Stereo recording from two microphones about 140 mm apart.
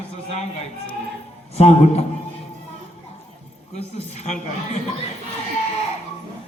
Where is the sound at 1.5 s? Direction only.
50° left (ahead or behind).